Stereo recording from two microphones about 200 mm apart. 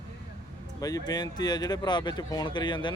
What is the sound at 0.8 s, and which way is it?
Speech, 20° left (ahead or behind).